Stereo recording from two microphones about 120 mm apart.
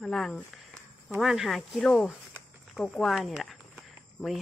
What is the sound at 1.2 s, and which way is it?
Speech, 5° right (ahead or behind).